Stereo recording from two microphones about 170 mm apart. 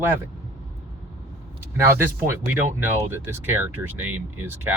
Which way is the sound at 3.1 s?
10° right (ahead or behind).